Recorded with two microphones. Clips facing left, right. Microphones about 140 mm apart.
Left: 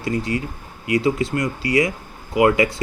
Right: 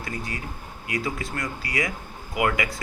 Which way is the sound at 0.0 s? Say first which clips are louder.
Left 10 dB; 25° left (ahead or behind).